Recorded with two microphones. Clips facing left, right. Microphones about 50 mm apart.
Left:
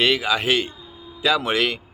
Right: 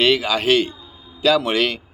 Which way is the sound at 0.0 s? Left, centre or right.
Centre.